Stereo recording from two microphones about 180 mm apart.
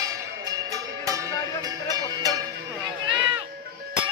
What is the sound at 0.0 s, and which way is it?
Music, 20° right (ahead or behind).